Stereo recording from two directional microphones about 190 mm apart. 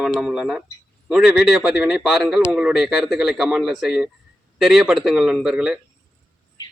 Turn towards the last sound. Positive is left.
turn(degrees=-5)  # may be behind; listen again after turning